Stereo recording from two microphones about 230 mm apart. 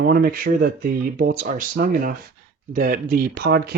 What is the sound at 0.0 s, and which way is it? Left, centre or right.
Speech, right.